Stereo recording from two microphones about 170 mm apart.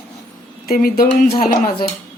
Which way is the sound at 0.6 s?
60° left (ahead or behind).